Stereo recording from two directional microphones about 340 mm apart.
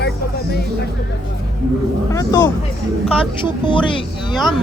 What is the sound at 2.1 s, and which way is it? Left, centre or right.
Speech, centre.